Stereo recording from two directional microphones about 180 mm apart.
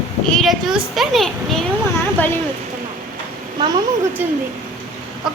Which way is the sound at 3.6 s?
25° right (ahead or behind).